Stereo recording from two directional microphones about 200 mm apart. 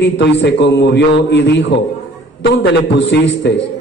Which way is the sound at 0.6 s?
60° left (ahead or behind).